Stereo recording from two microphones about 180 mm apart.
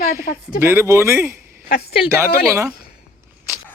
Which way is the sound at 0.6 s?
15° right (ahead or behind).